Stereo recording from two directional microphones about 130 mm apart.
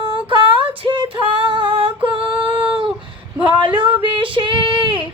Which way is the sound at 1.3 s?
40° right (ahead or behind).